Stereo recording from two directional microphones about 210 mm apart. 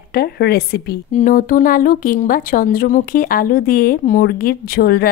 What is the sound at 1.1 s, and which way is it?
Speech, 40° left (ahead or behind).